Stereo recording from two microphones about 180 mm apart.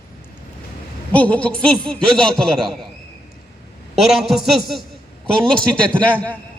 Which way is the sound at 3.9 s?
Centre (ahead or behind).